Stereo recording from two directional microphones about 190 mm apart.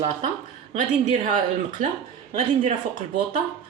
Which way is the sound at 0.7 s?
40° right (ahead or behind).